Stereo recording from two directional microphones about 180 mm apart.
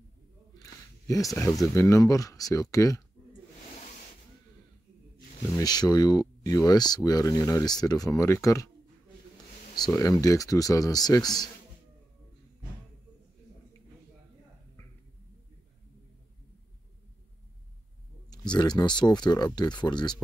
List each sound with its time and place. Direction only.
0.6 s a sound: 20° left (ahead or behind)
1.7 s speech: 15° left (ahead or behind)
5.6 s speech: 20° left (ahead or behind)
9.8 s speech: 20° left (ahead or behind)
18.5 s speech: 25° left (ahead or behind)